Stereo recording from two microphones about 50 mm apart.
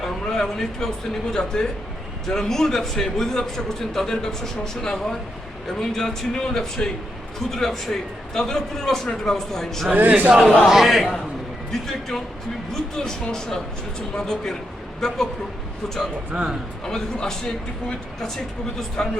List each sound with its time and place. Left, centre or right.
0.0 s a man's voice: centre
9.9 s speech: right
10.7 s a man's voice: centre
16.3 s a man's voice: centre
16.8 s a man's voice: centre